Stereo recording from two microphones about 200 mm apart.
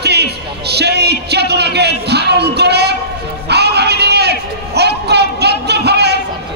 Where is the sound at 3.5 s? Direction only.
55° right (ahead or behind).